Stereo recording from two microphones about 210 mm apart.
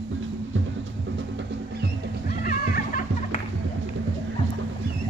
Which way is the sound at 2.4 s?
40° left (ahead or behind).